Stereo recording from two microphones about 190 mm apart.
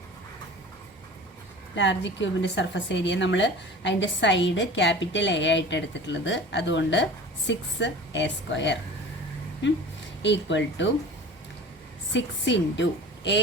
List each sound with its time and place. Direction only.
1.7 s a woman's voice: 70° left (ahead or behind)
12.1 s a woman's voice: 70° left (ahead or behind)